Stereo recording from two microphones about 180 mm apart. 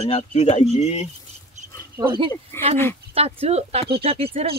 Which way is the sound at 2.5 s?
15° left (ahead or behind).